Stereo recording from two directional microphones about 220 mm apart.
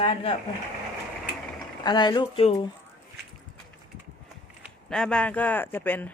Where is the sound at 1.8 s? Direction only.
20° left (ahead or behind).